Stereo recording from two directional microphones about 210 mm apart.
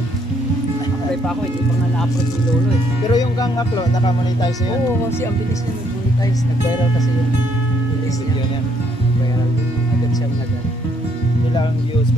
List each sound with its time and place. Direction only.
3.1 s speech: 20° left (ahead or behind)